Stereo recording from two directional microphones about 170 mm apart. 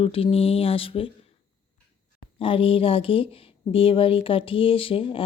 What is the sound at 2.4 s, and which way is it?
Speech, 30° left (ahead or behind).